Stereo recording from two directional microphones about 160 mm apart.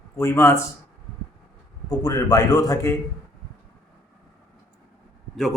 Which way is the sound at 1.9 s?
20° left (ahead or behind).